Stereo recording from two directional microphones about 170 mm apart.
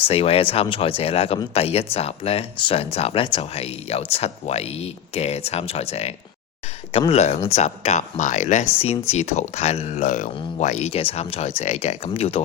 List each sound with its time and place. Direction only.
0.0 s speech: 35° left (ahead or behind)